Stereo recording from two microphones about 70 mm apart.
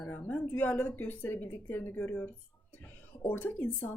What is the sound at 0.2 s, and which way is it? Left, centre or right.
A woman's voice, left.